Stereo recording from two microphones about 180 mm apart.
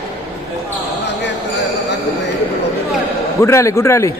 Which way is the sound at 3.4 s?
15° left (ahead or behind).